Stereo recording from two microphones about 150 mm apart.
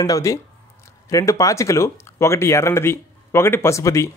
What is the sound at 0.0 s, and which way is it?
Speech, 20° left (ahead or behind).